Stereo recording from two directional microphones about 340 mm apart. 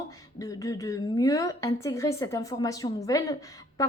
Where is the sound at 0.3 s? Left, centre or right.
Centre.